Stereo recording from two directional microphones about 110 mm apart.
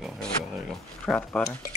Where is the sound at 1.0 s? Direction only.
10° left (ahead or behind).